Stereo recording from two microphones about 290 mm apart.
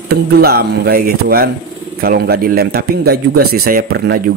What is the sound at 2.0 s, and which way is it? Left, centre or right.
Speech, right.